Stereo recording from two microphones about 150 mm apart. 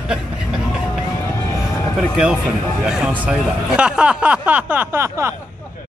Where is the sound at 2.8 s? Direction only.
5° right (ahead or behind).